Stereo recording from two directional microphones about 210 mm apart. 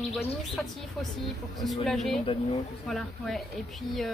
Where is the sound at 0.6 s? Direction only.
Centre (ahead or behind).